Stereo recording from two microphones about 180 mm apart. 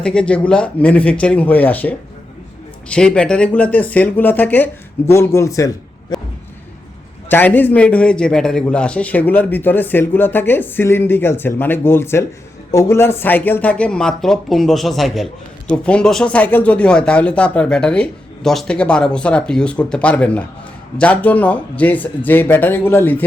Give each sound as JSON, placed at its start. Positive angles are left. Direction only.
{"t": 0.0, "sound": "speech", "side_deg": 5}
{"t": 6.1, "sound": "a sound", "side_deg": 20}
{"t": 7.3, "sound": "speech", "side_deg": 10}